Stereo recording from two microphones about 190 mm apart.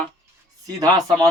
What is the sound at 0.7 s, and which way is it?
Speech, 20° right (ahead or behind).